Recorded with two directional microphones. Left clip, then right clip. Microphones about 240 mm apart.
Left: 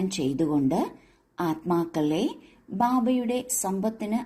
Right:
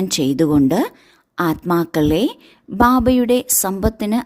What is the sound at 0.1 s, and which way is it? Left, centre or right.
A woman's voice, right.